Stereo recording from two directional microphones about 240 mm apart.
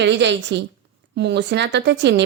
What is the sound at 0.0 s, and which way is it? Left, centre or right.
Speech, right.